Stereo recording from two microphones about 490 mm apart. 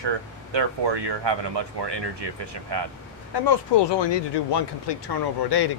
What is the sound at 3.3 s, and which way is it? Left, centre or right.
Speech, left.